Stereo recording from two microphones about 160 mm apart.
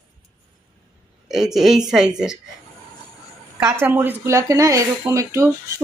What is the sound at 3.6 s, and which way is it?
Speech, 15° right (ahead or behind).